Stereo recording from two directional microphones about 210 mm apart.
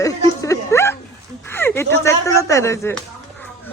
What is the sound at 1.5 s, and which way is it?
Speech, 10° left (ahead or behind).